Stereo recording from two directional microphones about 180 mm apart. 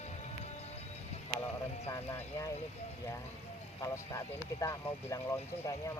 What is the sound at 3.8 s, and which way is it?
Speech, 15° left (ahead or behind).